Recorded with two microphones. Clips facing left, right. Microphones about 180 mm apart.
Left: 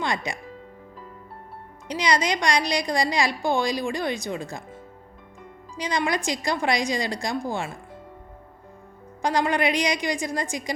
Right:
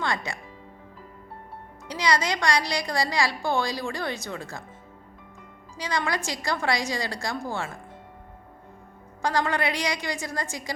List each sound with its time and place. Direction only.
0.0 s speech: 15° left (ahead or behind)
1.9 s a woman's voice: 20° left (ahead or behind)
5.7 s a woman's voice: 20° left (ahead or behind)
9.2 s a woman's voice: 15° left (ahead or behind)